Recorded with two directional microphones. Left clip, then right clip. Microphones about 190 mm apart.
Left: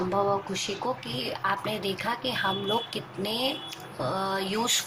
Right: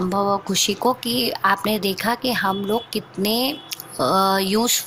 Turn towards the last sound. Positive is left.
turn(degrees=-50)  # may be behind; listen again after turning